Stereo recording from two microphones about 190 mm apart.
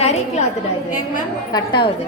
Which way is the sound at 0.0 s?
35° left (ahead or behind).